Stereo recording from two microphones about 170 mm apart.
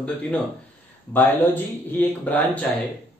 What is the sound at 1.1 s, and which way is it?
Speech, 10° left (ahead or behind).